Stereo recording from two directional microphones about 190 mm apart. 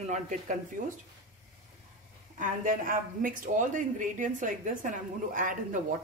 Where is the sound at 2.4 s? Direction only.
45° right (ahead or behind).